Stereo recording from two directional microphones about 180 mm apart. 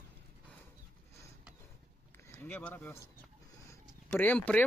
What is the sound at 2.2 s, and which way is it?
Speech, 15° left (ahead or behind).